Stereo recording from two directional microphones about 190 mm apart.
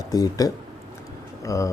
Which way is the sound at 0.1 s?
20° left (ahead or behind).